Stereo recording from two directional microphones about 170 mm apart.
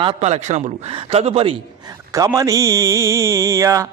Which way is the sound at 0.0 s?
35° right (ahead or behind).